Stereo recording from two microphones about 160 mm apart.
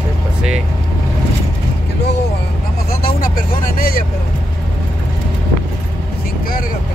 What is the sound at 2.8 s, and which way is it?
Vehicle, 65° left (ahead or behind).